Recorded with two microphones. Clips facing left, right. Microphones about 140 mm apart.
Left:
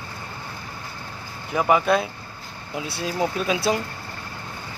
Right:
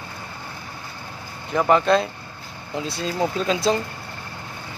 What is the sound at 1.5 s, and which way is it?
Speech, 10° left (ahead or behind).